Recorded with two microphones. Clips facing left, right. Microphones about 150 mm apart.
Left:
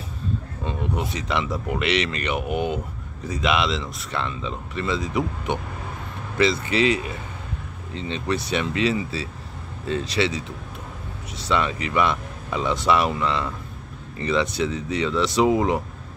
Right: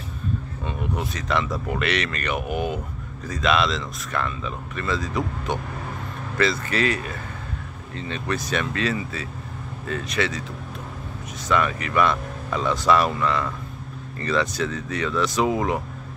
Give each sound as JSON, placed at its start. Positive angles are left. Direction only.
{"t": 0.7, "sound": "speech", "side_deg": 25}
{"t": 11.5, "sound": "speech", "side_deg": 20}